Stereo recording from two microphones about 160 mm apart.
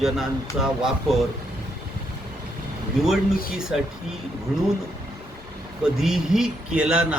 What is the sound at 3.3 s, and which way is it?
Speech, 65° left (ahead or behind).